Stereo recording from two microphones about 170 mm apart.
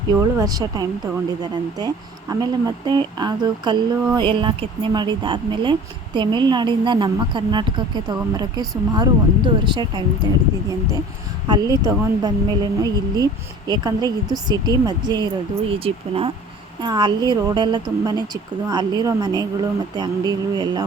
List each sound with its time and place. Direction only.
0.1 s a woman's voice: 20° right (ahead or behind)
2.3 s a woman's voice: 25° right (ahead or behind)
11.4 s a woman's voice: 25° right (ahead or behind)